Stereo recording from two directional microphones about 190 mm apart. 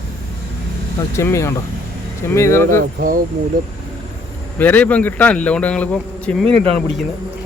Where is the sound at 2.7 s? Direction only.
50° right (ahead or behind).